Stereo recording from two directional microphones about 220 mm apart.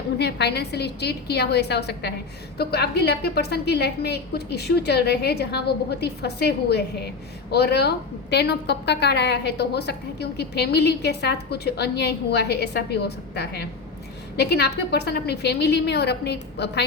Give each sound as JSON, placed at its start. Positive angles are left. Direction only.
{"t": 0.2, "sound": "a woman's voice", "side_deg": 50}